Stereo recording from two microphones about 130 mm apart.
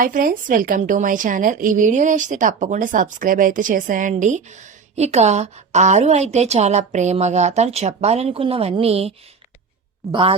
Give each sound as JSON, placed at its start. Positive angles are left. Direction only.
{"t": 0.0, "sound": "a woman's voice", "side_deg": -90}